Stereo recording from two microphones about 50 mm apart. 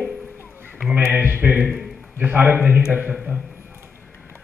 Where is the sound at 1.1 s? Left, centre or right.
Right.